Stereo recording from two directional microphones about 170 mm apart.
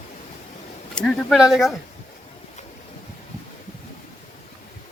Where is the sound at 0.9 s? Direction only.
5° left (ahead or behind).